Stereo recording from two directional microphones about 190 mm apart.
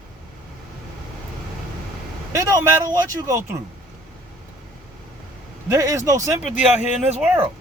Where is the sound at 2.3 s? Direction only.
20° right (ahead or behind).